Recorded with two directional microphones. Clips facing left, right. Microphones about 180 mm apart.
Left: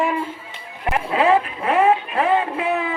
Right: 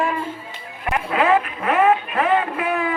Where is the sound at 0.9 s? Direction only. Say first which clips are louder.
Left 1 dB; 25° left (ahead or behind).